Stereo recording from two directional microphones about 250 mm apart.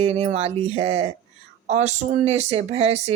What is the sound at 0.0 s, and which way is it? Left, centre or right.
Speech, right.